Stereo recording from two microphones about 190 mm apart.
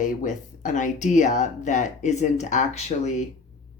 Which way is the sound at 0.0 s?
40° left (ahead or behind).